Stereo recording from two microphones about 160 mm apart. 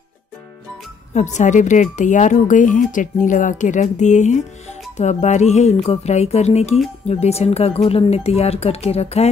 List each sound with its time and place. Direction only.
1.1 s speech: 50° left (ahead or behind)